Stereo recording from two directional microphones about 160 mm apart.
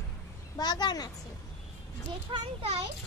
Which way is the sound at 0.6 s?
25° left (ahead or behind).